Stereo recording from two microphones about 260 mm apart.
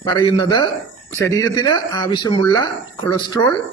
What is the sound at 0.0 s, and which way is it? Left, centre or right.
Speech, centre.